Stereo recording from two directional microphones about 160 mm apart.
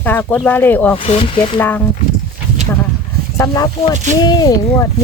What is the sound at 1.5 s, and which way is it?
Speech, 10° left (ahead or behind).